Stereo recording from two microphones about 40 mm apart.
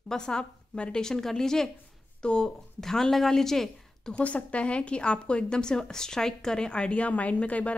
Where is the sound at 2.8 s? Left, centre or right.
Centre.